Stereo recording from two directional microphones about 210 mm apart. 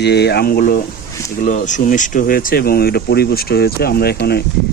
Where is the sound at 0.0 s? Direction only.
50° left (ahead or behind).